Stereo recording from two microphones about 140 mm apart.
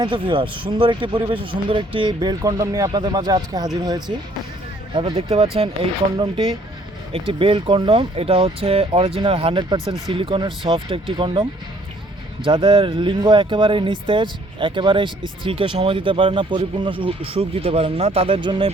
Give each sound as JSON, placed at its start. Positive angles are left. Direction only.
{"t": 0.0, "sound": "speech", "side_deg": -35}
{"t": 12.5, "sound": "speech", "side_deg": -35}